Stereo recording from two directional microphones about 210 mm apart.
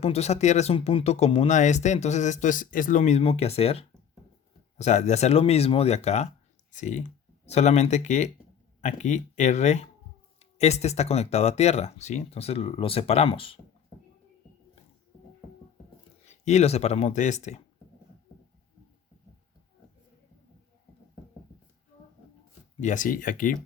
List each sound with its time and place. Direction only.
0.0 s speech: 30° left (ahead or behind)
16.2 s speech: 35° left (ahead or behind)
22.8 s speech: 35° left (ahead or behind)